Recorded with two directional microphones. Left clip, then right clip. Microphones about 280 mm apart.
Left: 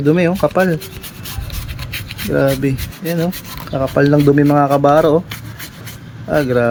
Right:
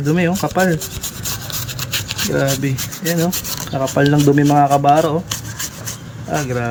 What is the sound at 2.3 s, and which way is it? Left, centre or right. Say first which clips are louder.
Speech: left 5 dB; left.